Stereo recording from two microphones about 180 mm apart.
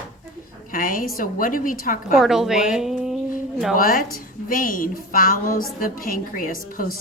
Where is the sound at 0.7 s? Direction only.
50° left (ahead or behind).